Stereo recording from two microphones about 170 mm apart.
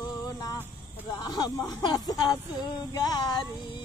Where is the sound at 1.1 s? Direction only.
25° left (ahead or behind).